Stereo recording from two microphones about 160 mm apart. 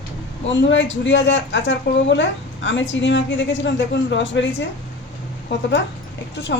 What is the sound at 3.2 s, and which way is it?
Speech, 90° left.